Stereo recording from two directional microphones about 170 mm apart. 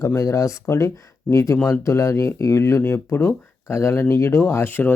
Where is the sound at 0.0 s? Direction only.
20° left (ahead or behind).